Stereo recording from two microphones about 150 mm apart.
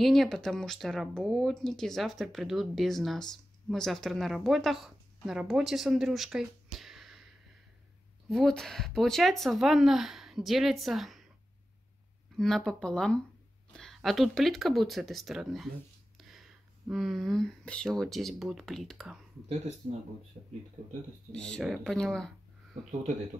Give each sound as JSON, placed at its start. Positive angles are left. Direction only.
{"t": 0.0, "sound": "speech", "side_deg": 0}
{"t": 8.3, "sound": "speech", "side_deg": 0}
{"t": 12.4, "sound": "speech", "side_deg": 5}
{"t": 19.8, "sound": "speech", "side_deg": -45}
{"t": 21.3, "sound": "speech", "side_deg": 5}